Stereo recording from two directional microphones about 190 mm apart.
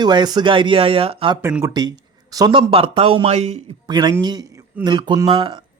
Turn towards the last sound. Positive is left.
turn(degrees=-25)  # may be behind; listen again after turning